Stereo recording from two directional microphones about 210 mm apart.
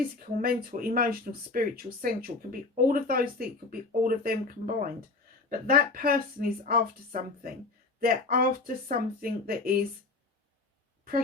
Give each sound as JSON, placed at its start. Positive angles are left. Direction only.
{"t": 0.4, "sound": "speech", "side_deg": -45}